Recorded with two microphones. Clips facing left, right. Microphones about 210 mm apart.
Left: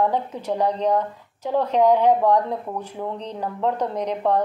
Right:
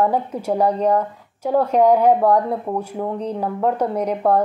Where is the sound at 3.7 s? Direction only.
10° right (ahead or behind).